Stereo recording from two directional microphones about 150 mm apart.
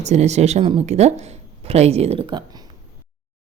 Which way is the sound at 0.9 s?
45° right (ahead or behind).